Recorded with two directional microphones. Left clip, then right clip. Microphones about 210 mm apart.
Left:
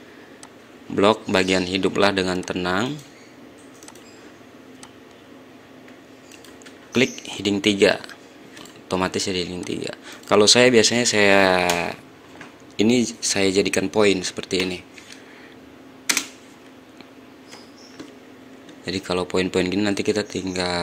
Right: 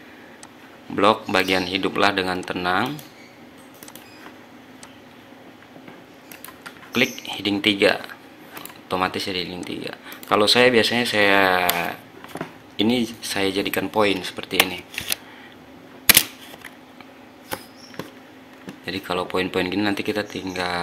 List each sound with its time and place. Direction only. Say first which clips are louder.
0.9 s speech: even; 35° left (ahead or behind)
6.9 s speech: even; 35° left (ahead or behind)
18.9 s speech: left 1 dB; 35° left (ahead or behind)